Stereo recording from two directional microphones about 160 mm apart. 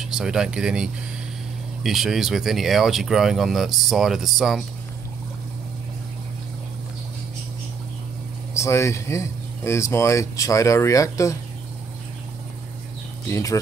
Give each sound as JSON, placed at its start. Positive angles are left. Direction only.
{"t": 0.0, "sound": "speech", "side_deg": -5}
{"t": 8.5, "sound": "speech", "side_deg": 15}
{"t": 13.3, "sound": "speech", "side_deg": 20}